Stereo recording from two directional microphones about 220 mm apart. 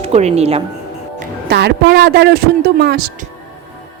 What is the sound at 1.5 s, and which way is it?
A woman's voice, 50° right (ahead or behind).